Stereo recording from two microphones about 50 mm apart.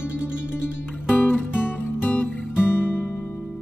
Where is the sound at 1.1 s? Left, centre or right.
Left.